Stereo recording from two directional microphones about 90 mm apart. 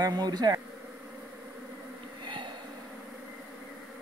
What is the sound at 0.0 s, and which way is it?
Speech, 50° right (ahead or behind).